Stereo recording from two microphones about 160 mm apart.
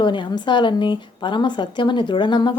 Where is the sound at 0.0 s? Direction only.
30° left (ahead or behind).